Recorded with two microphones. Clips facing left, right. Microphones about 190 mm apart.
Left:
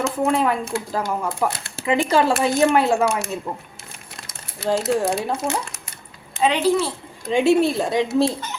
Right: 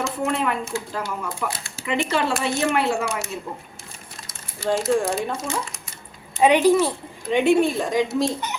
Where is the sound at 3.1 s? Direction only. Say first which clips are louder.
Left 5 dB; 65° left (ahead or behind).